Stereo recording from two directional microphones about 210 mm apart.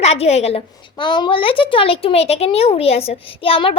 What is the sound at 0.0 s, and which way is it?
A woman's voice, 30° left (ahead or behind).